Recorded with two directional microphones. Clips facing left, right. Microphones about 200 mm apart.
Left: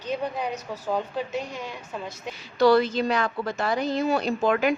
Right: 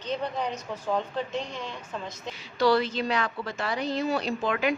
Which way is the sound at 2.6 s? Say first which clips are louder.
Left 4 dB; 45° left (ahead or behind).